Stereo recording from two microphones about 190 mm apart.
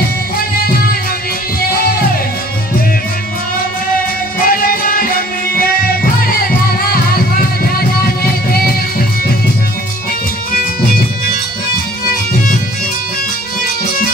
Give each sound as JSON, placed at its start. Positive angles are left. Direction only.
{"t": 4.4, "sound": "music", "side_deg": 50}
{"t": 6.9, "sound": "music", "side_deg": 50}